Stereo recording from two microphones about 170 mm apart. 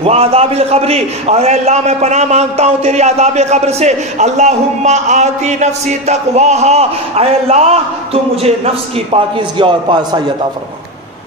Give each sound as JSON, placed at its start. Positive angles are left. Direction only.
{"t": 0.0, "sound": "a man's voice", "side_deg": -35}